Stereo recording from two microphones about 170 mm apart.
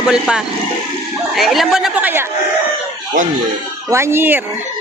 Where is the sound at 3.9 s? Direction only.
15° right (ahead or behind).